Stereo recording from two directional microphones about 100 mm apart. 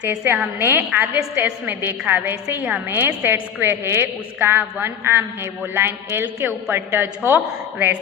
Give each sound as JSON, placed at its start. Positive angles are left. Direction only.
{"t": 0.0, "sound": "a woman's voice", "side_deg": -15}